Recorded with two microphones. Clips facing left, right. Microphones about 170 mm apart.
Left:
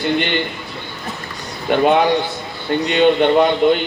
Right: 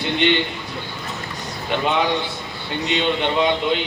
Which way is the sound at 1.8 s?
55° left (ahead or behind).